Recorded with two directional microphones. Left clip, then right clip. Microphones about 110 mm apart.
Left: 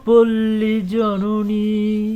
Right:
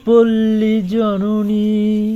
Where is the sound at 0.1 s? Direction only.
30° right (ahead or behind).